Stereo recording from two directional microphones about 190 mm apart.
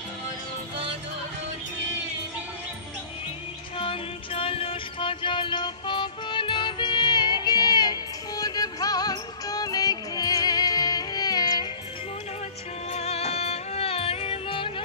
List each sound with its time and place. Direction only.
3.7 s music: 30° left (ahead or behind)
12.9 s music: 35° left (ahead or behind)